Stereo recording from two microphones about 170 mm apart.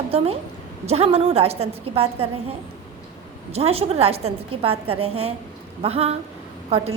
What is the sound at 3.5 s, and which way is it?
A woman's voice, 35° right (ahead or behind).